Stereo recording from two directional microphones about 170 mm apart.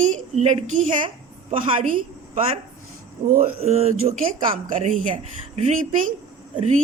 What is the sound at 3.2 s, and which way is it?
A woman's voice, 45° right (ahead or behind).